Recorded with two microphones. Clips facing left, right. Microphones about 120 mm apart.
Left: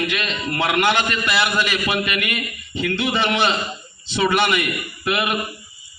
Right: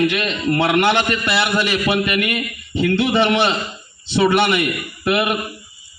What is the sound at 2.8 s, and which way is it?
A man's voice, 20° right (ahead or behind).